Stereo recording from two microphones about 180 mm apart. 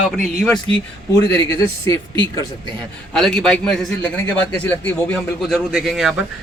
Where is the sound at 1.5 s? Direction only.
15° left (ahead or behind).